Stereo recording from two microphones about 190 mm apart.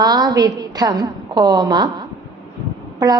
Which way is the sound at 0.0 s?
20° right (ahead or behind).